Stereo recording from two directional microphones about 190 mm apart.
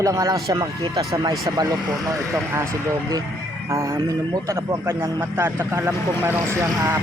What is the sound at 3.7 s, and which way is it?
Speech, 15° right (ahead or behind).